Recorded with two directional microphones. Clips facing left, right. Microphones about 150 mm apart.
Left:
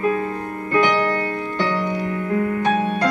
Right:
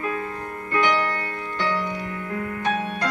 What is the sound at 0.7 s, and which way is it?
Music, 15° left (ahead or behind).